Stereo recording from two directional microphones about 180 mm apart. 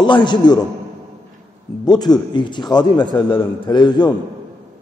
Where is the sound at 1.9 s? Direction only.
25° left (ahead or behind).